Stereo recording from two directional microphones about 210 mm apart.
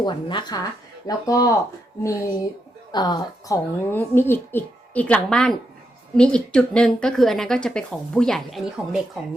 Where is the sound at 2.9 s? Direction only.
20° left (ahead or behind).